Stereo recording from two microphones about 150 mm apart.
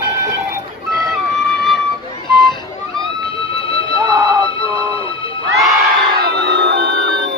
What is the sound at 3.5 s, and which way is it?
Music, 35° left (ahead or behind).